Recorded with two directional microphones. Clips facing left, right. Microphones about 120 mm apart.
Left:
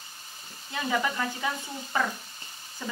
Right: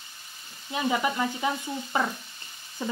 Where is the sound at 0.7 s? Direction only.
20° right (ahead or behind).